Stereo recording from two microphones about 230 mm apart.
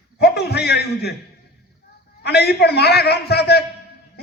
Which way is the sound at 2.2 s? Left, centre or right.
Left.